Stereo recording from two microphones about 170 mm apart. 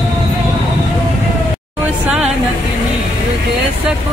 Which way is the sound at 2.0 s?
5° right (ahead or behind).